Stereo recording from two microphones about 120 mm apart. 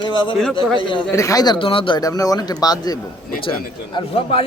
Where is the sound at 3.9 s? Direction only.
50° left (ahead or behind).